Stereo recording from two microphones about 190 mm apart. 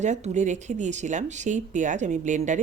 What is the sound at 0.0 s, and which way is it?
Speech, 40° right (ahead or behind).